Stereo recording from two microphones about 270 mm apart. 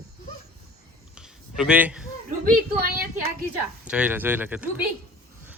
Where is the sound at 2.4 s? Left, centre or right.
Right.